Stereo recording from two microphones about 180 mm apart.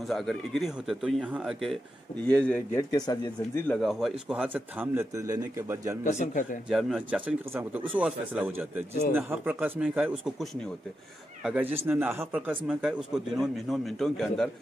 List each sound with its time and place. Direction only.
0.0 s speech: centre (ahead or behind)
2.9 s speech: 20° left (ahead or behind)
3.6 s a man's voice: centre (ahead or behind); by 5.9 s 15° right (ahead or behind)
6.0 s speech: 45° left (ahead or behind)
6.7 s a man's voice: centre (ahead or behind)